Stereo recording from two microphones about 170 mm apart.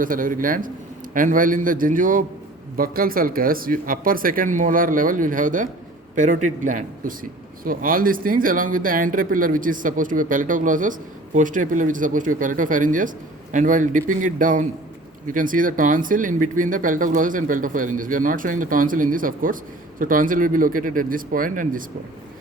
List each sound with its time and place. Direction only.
0.0 s speech: 55° right (ahead or behind)